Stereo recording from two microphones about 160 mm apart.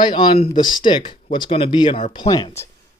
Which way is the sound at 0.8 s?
30° left (ahead or behind).